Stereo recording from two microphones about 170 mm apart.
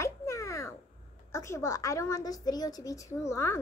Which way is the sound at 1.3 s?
15° left (ahead or behind).